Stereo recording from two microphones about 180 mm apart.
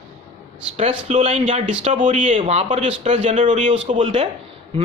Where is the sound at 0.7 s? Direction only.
35° right (ahead or behind).